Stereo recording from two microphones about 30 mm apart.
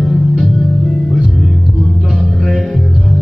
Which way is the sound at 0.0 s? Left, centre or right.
Centre.